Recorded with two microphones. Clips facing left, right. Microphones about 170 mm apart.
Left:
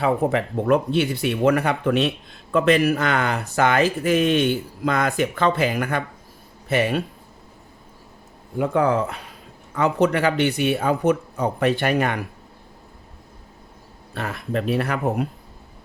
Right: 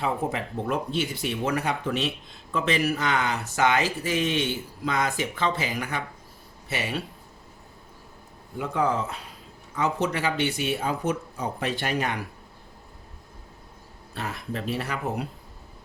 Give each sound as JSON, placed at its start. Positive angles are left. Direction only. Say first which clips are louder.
{"t": 0.0, "sound": "speech", "louder": "left 7 dB", "side_deg": 65}
{"t": 8.5, "sound": "speech", "louder": "left 6 dB", "side_deg": 55}
{"t": 14.2, "sound": "speech", "louder": "left 6 dB", "side_deg": 60}